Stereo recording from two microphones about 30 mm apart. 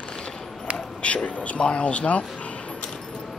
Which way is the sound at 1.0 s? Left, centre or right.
Left.